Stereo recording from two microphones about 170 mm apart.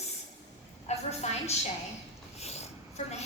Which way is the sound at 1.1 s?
40° left (ahead or behind).